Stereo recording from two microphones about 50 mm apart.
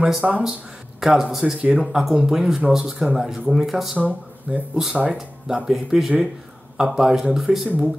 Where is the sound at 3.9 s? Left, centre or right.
Right.